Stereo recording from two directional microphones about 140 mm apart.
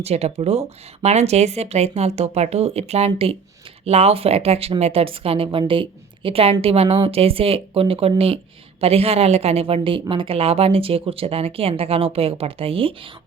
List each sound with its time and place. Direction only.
0.0 s speech: 50° right (ahead or behind)